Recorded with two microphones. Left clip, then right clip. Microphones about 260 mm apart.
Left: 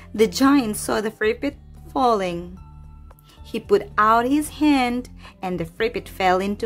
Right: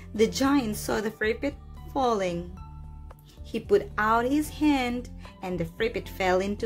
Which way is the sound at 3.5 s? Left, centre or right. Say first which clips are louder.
Left 5 dB; centre.